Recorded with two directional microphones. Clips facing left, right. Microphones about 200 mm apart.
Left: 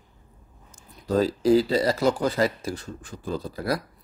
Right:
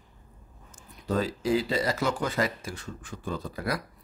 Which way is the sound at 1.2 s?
35° left (ahead or behind).